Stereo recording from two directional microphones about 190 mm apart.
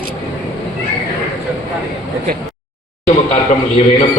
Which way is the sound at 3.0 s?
35° left (ahead or behind).